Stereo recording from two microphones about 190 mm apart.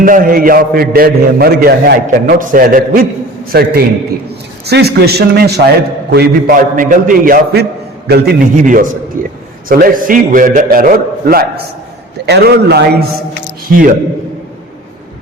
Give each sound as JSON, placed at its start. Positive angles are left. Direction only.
{"t": 0.0, "sound": "a man's voice", "side_deg": -50}
{"t": 3.5, "sound": "a man's voice", "side_deg": -60}
{"t": 13.7, "sound": "a man's voice", "side_deg": -50}